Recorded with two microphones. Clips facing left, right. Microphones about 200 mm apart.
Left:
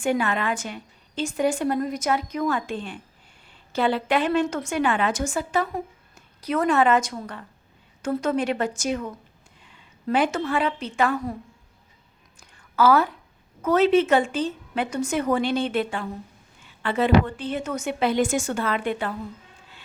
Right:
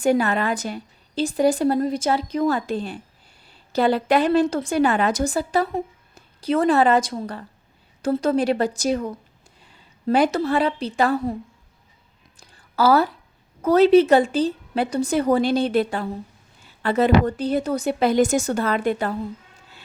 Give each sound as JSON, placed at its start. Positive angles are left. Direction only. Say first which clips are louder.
{"t": 0.0, "sound": "a woman's voice", "louder": "right 4 dB", "side_deg": -40}
{"t": 12.4, "sound": "a sound", "louder": "right 1 dB", "side_deg": -35}
{"t": 13.6, "sound": "speech", "louder": "right 5 dB", "side_deg": -35}